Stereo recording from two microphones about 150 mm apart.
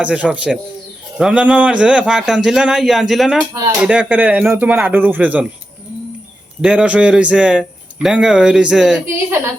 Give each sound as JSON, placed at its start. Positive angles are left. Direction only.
{"t": 0.0, "sound": "a man's voice", "side_deg": -10}
{"t": 3.5, "sound": "speech", "side_deg": -20}
{"t": 3.8, "sound": "speech", "side_deg": -5}
{"t": 6.6, "sound": "speech", "side_deg": -5}